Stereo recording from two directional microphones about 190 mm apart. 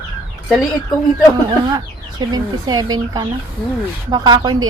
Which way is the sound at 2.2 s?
20° right (ahead or behind).